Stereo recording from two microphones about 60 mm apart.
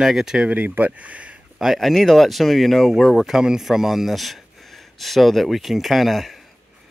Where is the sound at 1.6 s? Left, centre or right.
Centre.